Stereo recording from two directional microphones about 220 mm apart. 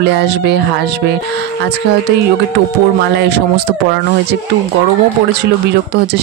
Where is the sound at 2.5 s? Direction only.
50° right (ahead or behind).